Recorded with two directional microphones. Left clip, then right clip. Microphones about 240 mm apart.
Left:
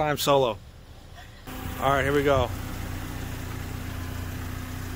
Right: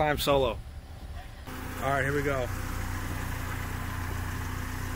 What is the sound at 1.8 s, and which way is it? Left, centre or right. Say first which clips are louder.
Speech: left 5 dB; centre.